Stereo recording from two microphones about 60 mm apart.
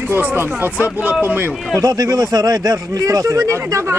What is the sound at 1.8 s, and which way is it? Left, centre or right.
Speech, right.